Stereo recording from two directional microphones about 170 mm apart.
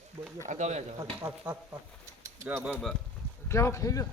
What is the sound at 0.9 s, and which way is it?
Speech, 15° right (ahead or behind).